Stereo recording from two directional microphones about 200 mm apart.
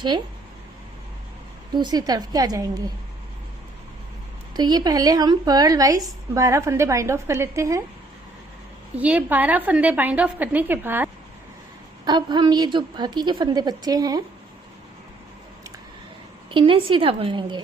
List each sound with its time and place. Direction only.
1.7 s a woman's voice: 20° right (ahead or behind)
4.5 s a woman's voice: 20° right (ahead or behind)
9.0 s a woman's voice: 5° right (ahead or behind)
12.0 s a woman's voice: 20° right (ahead or behind)
16.5 s a woman's voice: 25° right (ahead or behind)